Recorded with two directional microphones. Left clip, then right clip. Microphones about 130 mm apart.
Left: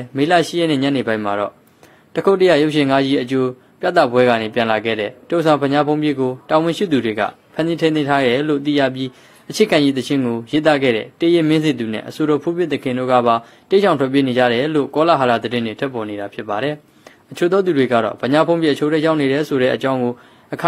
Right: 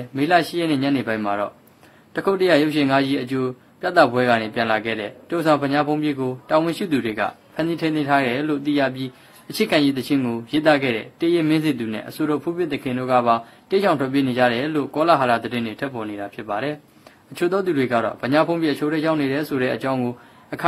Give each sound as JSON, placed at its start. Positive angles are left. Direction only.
{"t": 0.1, "sound": "a man's voice", "side_deg": 35}